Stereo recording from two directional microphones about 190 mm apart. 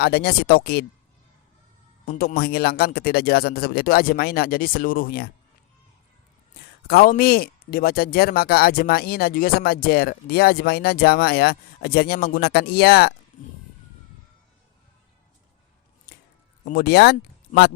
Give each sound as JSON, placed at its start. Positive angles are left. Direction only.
{"t": 0.0, "sound": "speech", "side_deg": 55}
{"t": 2.0, "sound": "speech", "side_deg": 50}
{"t": 6.8, "sound": "speech", "side_deg": 55}
{"t": 16.6, "sound": "speech", "side_deg": 55}